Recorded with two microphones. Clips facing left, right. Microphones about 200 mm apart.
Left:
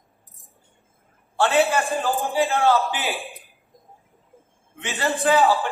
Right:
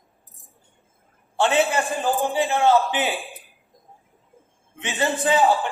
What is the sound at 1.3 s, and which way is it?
A man's voice, 20° right (ahead or behind).